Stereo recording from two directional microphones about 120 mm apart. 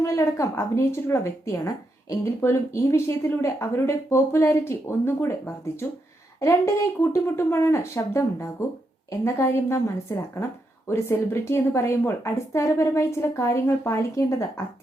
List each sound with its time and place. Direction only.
0.0 s speech: 25° left (ahead or behind)